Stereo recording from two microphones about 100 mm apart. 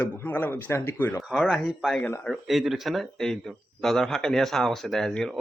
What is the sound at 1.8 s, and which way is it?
Speech, 5° left (ahead or behind).